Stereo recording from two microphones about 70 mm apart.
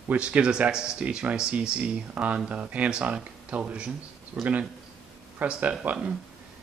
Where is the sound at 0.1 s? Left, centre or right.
Centre.